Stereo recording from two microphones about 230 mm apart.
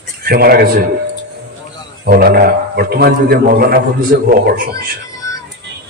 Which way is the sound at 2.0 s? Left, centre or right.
Right.